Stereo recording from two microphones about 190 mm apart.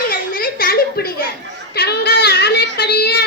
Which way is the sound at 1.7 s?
60° left (ahead or behind).